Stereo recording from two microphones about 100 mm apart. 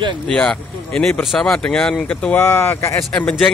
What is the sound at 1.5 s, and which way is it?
Speech, 10° left (ahead or behind).